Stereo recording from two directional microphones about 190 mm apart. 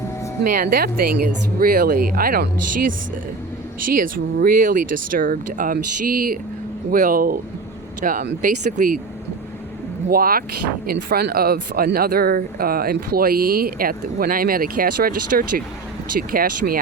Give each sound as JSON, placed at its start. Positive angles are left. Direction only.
{"t": 0.4, "sound": "speech", "side_deg": -45}
{"t": 3.8, "sound": "speech", "side_deg": -45}
{"t": 10.1, "sound": "speech", "side_deg": -50}